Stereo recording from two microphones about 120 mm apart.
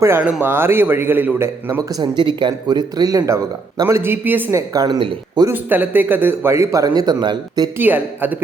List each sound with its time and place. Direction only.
0.0 s a man's voice: 15° right (ahead or behind)
2.0 s speech: 40° right (ahead or behind); by 4.6 s 15° right (ahead or behind)
4.7 s speech: 30° right (ahead or behind)
5.5 s speech: 15° right (ahead or behind); by 7.7 s 35° right (ahead or behind)
7.8 s a man's voice: 15° right (ahead or behind)